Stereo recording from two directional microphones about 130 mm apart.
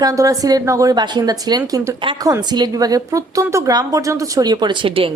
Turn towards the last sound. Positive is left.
turn(degrees=-45)  # may be behind; listen again after turning